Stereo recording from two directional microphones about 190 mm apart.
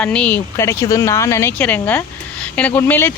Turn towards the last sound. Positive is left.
turn(degrees=10)  # may be behind; listen again after turning